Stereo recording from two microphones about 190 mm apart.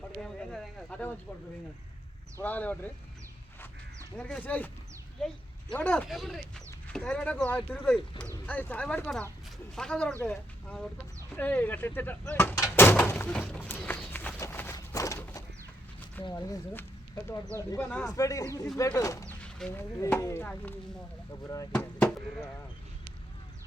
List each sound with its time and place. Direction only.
0.2 s speech: centre (ahead or behind)
2.4 s speech: 10° left (ahead or behind)
4.2 s speech: 5° left (ahead or behind)
19.2 s speech: 5° left (ahead or behind)
21.7 s a sound: 5° left (ahead or behind)